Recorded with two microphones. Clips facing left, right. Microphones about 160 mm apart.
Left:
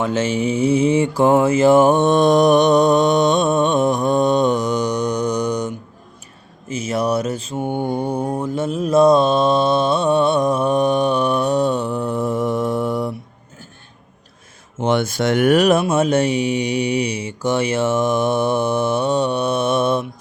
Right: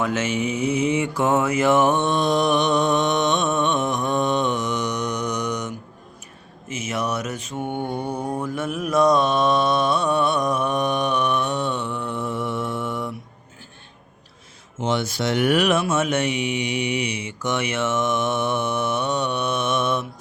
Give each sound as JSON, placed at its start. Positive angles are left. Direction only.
{"t": 0.0, "sound": "mantra", "side_deg": 30}
{"t": 14.8, "sound": "speech", "side_deg": 55}